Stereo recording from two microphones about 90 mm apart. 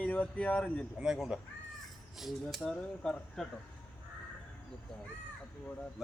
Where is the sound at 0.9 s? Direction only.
5° right (ahead or behind).